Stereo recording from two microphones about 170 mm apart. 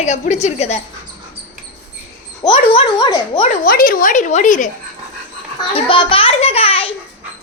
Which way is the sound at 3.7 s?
55° left (ahead or behind).